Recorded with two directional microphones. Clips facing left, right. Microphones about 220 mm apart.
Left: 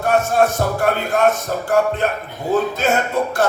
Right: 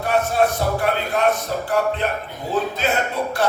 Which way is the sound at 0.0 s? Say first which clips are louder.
Left 3 dB; 45° left (ahead or behind).